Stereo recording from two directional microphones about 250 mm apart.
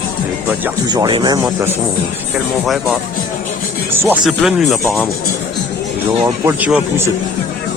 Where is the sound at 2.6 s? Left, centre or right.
Centre.